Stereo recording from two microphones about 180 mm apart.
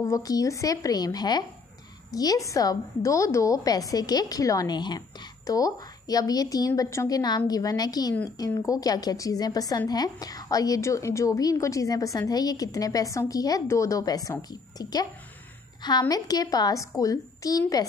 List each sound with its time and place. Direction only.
0.0 s a woman's voice: 20° left (ahead or behind)